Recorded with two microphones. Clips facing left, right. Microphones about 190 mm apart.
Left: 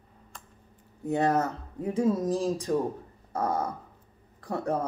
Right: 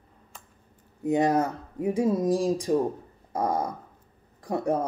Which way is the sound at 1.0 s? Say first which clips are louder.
Right 3 dB; 15° right (ahead or behind).